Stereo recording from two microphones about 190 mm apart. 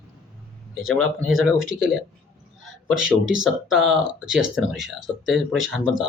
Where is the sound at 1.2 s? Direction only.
Centre (ahead or behind).